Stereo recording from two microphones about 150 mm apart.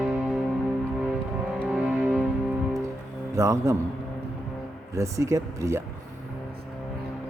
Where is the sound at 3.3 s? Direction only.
20° right (ahead or behind).